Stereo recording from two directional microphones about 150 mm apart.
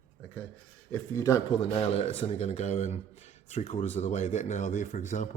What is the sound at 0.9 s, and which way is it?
Speech, 20° left (ahead or behind).